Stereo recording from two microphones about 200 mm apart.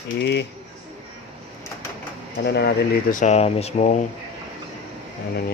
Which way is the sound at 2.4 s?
55° left (ahead or behind).